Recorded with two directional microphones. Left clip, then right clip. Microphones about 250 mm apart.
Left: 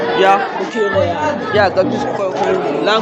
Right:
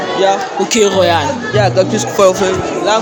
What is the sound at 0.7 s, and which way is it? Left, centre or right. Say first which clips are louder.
Speech: right 5 dB; right.